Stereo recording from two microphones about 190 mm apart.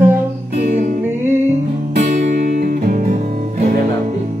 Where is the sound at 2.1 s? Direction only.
45° right (ahead or behind).